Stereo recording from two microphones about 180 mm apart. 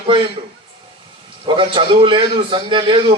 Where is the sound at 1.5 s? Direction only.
25° right (ahead or behind).